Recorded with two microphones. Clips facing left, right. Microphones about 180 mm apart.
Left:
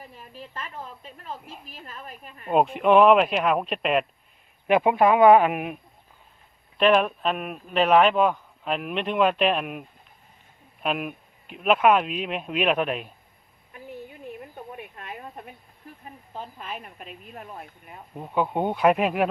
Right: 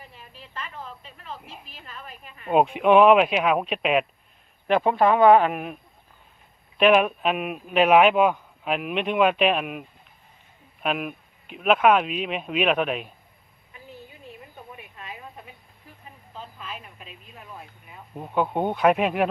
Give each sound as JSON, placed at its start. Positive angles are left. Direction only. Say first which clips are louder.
{"t": 0.1, "sound": "speech", "louder": "left 3 dB", "side_deg": 45}
{"t": 2.5, "sound": "speech", "louder": "right 1 dB", "side_deg": 0}
{"t": 4.7, "sound": "speech", "louder": "left 1 dB", "side_deg": 15}
{"t": 6.7, "sound": "speech", "louder": "right 2 dB", "side_deg": -5}
{"t": 10.8, "sound": "speech", "louder": "right 1 dB", "side_deg": 0}
{"t": 13.7, "sound": "a sound", "louder": "left 5 dB", "side_deg": 55}
{"t": 16.4, "sound": "speech", "louder": "left 2 dB", "side_deg": 50}
{"t": 18.1, "sound": "speech", "louder": "right 1 dB", "side_deg": 0}